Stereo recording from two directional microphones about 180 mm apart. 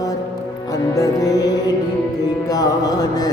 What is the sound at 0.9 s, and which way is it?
Music, 20° left (ahead or behind).